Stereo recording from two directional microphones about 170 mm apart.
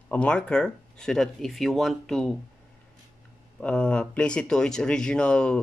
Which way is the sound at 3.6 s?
5° left (ahead or behind).